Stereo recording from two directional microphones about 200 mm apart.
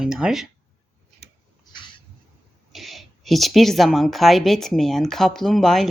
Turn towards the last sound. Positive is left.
turn(degrees=0)  # may be behind; listen again after turning